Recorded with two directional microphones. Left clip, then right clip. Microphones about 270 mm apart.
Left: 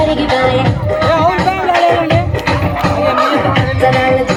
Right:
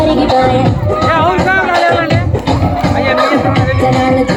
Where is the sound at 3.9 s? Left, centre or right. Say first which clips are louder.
Even; right.